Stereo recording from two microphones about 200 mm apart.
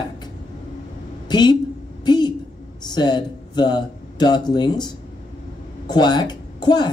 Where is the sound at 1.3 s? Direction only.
20° left (ahead or behind).